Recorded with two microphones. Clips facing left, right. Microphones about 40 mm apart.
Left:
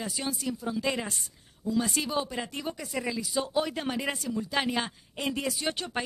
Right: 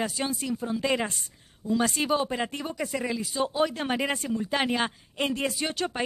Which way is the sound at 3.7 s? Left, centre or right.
Right.